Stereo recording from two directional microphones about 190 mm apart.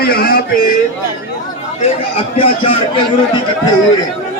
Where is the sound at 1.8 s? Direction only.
30° left (ahead or behind).